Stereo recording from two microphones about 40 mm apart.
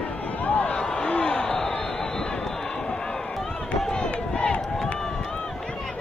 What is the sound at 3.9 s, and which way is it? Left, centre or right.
Crowd, left.